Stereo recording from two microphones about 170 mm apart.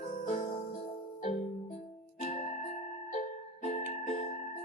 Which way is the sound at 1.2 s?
45° left (ahead or behind).